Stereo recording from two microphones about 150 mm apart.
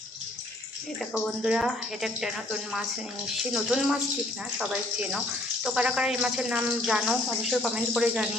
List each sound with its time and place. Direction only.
1.1 s speech: centre (ahead or behind)